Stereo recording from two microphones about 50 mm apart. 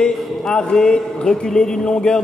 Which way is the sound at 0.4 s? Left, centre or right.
Centre.